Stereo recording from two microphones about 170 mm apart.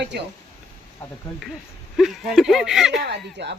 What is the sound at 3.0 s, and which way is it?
Speech, 85° right.